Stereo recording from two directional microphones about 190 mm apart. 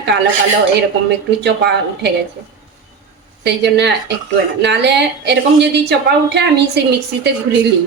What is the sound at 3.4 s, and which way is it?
A woman's voice, 65° right (ahead or behind).